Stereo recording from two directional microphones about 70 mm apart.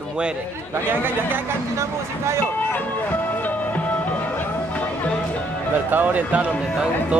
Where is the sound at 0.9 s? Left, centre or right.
Right.